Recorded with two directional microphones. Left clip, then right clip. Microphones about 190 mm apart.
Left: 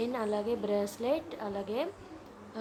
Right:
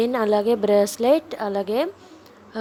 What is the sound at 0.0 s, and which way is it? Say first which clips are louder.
A woman's voice: right 13 dB; 40° right (ahead or behind).